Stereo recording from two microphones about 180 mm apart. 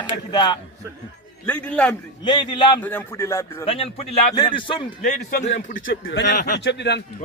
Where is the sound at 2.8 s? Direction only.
10° left (ahead or behind).